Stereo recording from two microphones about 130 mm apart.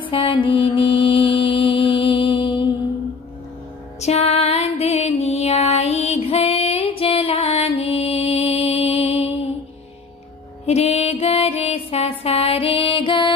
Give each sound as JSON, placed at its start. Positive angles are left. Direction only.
{"t": 0.0, "sound": "mantra", "side_deg": 40}
{"t": 4.0, "sound": "music", "side_deg": 55}
{"t": 10.7, "sound": "music", "side_deg": 55}